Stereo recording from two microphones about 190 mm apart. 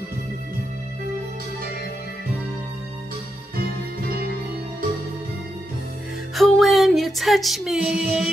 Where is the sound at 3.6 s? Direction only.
55° right (ahead or behind).